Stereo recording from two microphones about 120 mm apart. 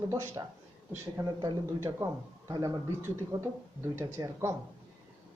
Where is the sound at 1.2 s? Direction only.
35° right (ahead or behind).